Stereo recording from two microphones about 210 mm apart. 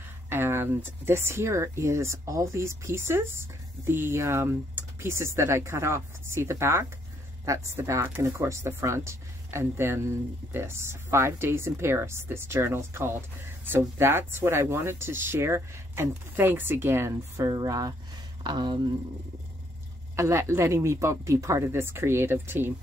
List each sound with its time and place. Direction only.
0.3 s speech: 10° right (ahead or behind)
20.2 s speech: 15° right (ahead or behind)